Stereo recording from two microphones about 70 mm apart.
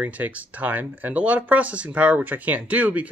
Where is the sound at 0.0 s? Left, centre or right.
Right.